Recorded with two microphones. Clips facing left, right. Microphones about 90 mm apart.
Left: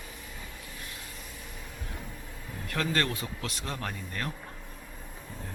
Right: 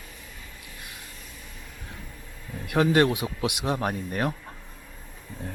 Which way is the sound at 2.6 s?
20° right (ahead or behind).